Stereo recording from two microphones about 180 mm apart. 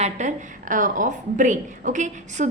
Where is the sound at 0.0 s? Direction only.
40° right (ahead or behind).